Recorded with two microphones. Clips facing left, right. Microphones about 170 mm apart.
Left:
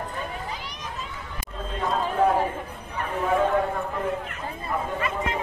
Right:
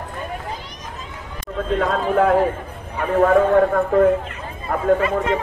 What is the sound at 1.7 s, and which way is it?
Speech, 75° right (ahead or behind).